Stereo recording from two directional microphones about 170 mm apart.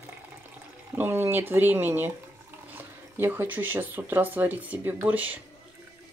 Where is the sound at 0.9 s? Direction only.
15° right (ahead or behind).